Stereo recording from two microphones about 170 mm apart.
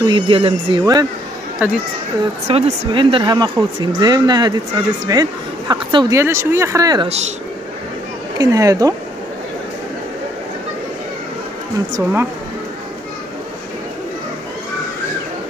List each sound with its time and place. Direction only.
0.0 s a woman's voice: 30° right (ahead or behind)
1.6 s speech: 10° right (ahead or behind)
2.4 s a woman's voice: 35° right (ahead or behind)
6.1 s speech: 15° right (ahead or behind)
7.1 s speech: 40° right (ahead or behind)
8.4 s a woman's voice: 20° right (ahead or behind)